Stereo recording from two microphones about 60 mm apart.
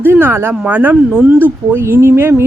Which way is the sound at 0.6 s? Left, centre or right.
Right.